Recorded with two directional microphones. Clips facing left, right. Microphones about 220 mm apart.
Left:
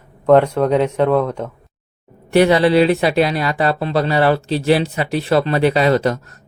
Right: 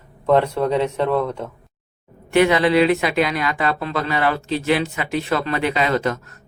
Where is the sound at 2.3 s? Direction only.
35° left (ahead or behind).